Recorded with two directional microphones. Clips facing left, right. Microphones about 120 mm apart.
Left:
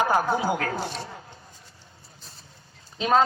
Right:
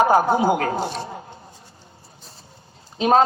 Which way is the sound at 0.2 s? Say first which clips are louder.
Right 6 dB; 30° right (ahead or behind).